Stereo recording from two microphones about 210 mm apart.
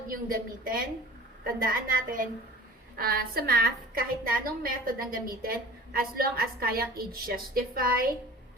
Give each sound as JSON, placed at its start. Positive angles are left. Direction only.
{"t": 0.1, "sound": "a woman's voice", "side_deg": -45}